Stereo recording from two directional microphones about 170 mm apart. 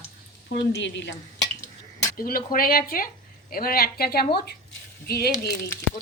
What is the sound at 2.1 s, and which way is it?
A woman's voice, 60° left (ahead or behind).